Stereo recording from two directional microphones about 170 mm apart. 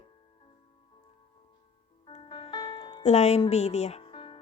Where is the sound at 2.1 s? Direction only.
35° left (ahead or behind).